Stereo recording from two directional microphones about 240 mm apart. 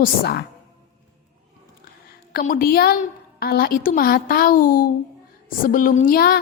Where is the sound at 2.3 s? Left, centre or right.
Left.